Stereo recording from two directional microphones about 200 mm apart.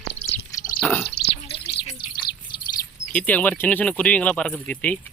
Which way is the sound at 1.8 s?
25° left (ahead or behind).